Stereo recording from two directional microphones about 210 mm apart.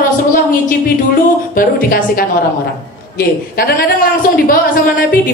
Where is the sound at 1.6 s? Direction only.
40° left (ahead or behind).